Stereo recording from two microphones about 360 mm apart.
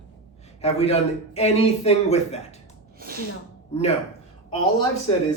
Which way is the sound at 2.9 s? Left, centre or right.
Right.